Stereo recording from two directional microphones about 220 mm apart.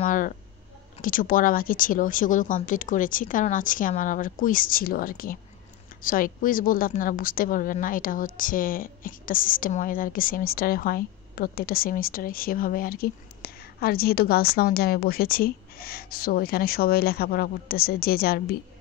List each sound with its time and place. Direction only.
0.0 s a woman's voice: 35° left (ahead or behind)